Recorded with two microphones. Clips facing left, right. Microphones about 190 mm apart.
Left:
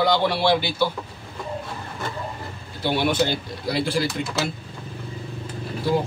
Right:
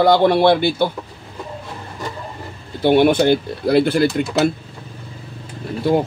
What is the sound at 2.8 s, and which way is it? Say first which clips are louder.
Speech: right 9 dB; 55° right (ahead or behind).